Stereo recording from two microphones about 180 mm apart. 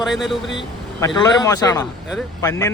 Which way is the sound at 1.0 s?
20° left (ahead or behind).